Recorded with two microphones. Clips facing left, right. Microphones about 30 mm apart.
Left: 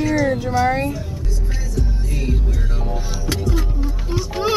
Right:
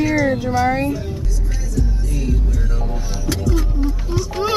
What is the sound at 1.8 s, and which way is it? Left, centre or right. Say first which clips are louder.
Music: right 2 dB; left.